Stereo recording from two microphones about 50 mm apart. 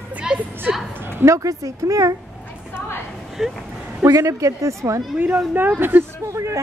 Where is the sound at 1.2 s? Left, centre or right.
Right.